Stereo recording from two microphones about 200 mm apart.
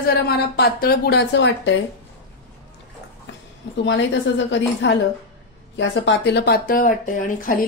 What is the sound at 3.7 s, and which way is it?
A woman's voice, 65° left (ahead or behind).